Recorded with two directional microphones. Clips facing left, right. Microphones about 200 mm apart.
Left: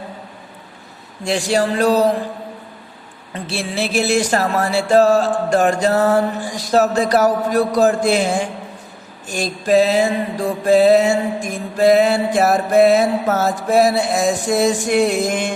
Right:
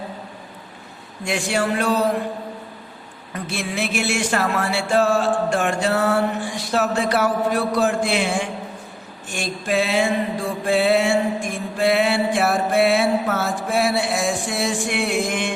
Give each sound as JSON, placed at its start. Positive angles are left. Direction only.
{"t": 1.2, "sound": "mantra", "side_deg": 35}
{"t": 3.3, "sound": "mantra", "side_deg": 30}